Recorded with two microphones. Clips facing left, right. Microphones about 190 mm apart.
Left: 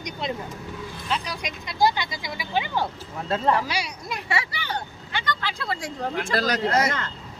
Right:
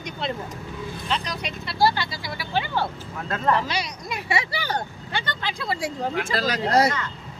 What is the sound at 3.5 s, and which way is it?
Speech, 10° left (ahead or behind).